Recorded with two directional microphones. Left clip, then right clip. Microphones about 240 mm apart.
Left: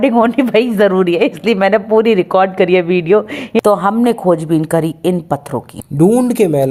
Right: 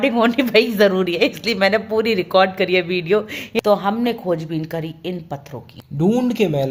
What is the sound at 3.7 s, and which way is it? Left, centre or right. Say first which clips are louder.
A woman's voice: left 5 dB; left.